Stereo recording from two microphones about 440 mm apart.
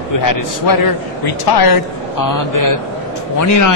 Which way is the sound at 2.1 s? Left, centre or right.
Left.